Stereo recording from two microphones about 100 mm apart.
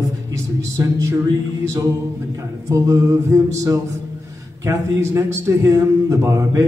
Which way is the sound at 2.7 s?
35° right (ahead or behind).